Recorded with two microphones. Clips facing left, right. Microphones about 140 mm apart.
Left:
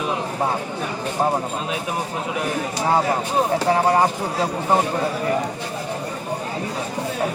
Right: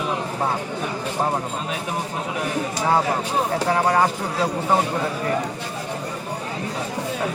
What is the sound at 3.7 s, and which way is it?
Speech, 25° left (ahead or behind).